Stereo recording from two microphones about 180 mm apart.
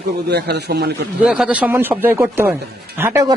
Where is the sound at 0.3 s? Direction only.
65° right (ahead or behind).